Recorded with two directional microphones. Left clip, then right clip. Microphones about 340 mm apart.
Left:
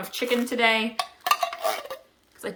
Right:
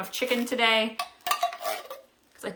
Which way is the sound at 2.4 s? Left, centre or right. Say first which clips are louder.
Left 2 dB; centre.